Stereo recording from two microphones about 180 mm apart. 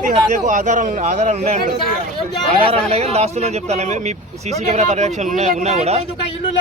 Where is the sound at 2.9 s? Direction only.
35° right (ahead or behind).